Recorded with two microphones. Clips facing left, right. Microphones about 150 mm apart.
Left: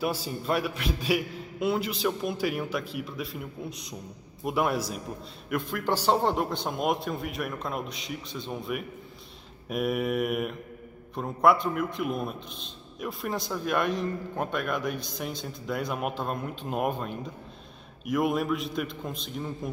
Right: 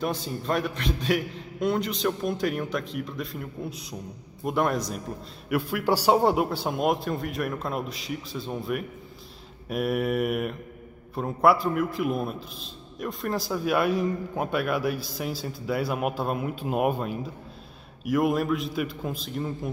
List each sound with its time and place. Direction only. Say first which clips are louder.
0.0 s a man's voice: right 1 dB; 5° left (ahead or behind)
5.5 s a man's voice: right 4 dB; 10° right (ahead or behind)